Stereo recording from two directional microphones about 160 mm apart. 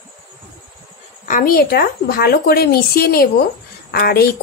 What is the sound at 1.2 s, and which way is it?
Speech, 60° left (ahead or behind).